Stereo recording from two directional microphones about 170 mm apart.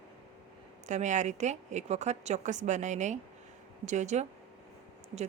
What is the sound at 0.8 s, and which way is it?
A woman's voice, 45° right (ahead or behind).